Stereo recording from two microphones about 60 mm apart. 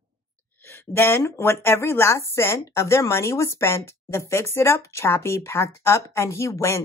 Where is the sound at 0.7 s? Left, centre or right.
Left.